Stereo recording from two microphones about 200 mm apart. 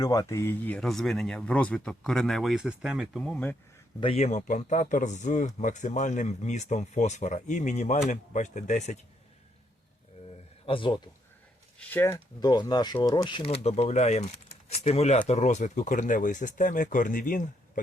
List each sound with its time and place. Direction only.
0.0 s speech: 15° left (ahead or behind)
4.0 s a man's voice: 30° left (ahead or behind)
10.7 s speech: 25° left (ahead or behind)
11.8 s a man's voice: 10° left (ahead or behind); by 17.4 s 40° left (ahead or behind)